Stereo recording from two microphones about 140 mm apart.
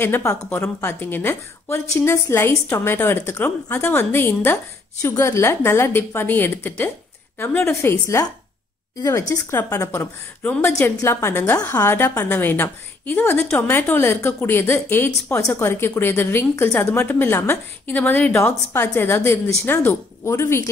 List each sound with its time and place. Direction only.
0.0 s a woman's voice: 20° left (ahead or behind)
9.3 s a woman's voice: 20° left (ahead or behind)